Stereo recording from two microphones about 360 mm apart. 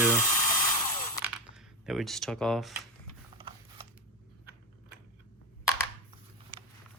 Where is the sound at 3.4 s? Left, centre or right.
Centre.